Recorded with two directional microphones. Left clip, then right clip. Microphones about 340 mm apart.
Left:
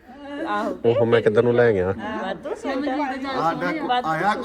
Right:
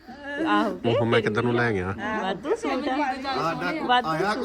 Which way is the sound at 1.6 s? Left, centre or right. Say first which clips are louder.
Left 8 dB; centre.